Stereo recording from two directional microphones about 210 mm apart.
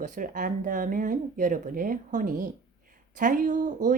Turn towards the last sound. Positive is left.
turn(degrees=-40)  # may be behind; listen again after turning